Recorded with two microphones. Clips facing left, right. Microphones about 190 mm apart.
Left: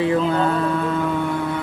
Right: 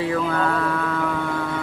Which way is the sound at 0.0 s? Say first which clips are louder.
Left 4 dB; 25° left (ahead or behind).